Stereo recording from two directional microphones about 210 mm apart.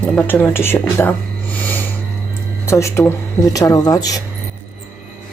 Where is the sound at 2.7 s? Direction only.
15° left (ahead or behind).